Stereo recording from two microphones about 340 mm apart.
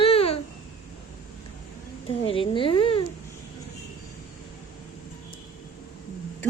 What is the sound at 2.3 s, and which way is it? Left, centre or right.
Speech, centre.